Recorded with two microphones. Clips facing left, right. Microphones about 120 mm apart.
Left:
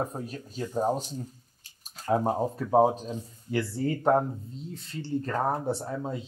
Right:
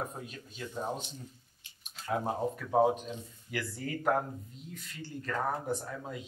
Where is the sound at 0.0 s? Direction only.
35° left (ahead or behind).